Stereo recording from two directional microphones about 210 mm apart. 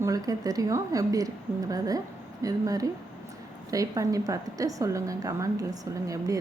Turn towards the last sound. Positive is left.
turn(degrees=-15)  # may be behind; listen again after turning